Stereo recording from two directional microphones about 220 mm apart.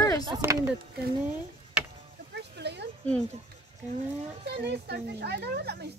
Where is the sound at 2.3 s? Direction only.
50° right (ahead or behind).